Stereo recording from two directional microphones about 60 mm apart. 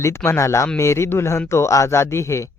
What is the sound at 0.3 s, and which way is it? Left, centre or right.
A man's voice, left.